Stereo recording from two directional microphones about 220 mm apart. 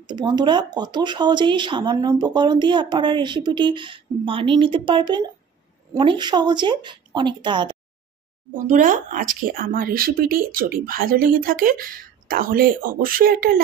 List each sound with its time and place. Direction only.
0.0 s speech: 20° right (ahead or behind)
8.5 s speech: 35° right (ahead or behind)